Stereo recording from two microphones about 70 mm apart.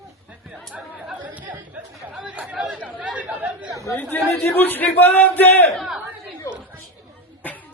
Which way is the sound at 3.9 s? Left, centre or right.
Left.